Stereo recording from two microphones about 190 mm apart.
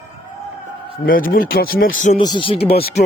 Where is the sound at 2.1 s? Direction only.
25° left (ahead or behind).